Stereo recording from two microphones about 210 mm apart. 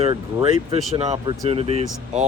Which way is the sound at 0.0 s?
25° right (ahead or behind).